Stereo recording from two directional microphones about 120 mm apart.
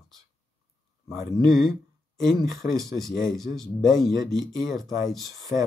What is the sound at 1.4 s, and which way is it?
Speech, centre (ahead or behind).